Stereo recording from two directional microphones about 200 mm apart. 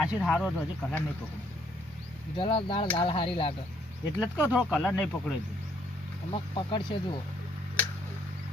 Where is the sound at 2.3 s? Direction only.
25° left (ahead or behind).